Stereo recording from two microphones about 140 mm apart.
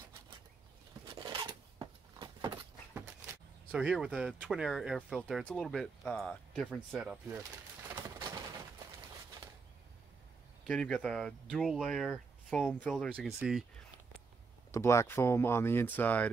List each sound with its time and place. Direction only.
1.0 s a sound: 30° right (ahead or behind)
3.7 s speech: 5° right (ahead or behind)
10.7 s speech: 5° left (ahead or behind)
13.2 s speech: 5° right (ahead or behind)
14.7 s speech: 20° left (ahead or behind)